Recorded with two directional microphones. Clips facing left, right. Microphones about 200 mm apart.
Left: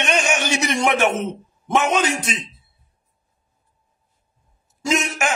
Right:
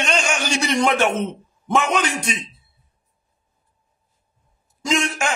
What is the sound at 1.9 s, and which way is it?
Speech, 25° left (ahead or behind).